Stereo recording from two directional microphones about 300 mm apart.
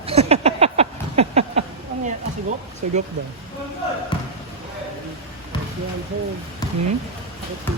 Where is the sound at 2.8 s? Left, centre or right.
Right.